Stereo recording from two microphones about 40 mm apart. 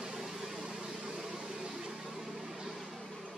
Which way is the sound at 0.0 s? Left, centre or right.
Centre.